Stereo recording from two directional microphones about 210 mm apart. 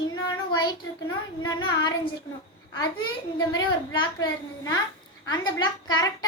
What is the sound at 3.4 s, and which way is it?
A child's voice, 20° left (ahead or behind).